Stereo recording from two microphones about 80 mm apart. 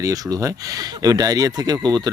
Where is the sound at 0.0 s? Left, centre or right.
Right.